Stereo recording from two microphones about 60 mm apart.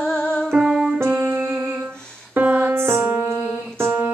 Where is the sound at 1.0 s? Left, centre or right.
Right.